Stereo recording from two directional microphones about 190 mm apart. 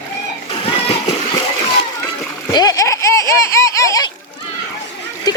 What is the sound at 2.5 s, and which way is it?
Speech, 20° left (ahead or behind).